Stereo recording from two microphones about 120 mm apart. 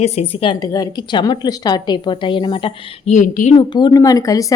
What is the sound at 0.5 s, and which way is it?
A woman's voice, 30° left (ahead or behind).